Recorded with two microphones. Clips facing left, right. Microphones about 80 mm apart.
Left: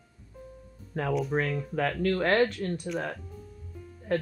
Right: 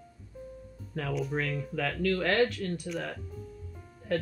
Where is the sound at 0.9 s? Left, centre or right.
Left.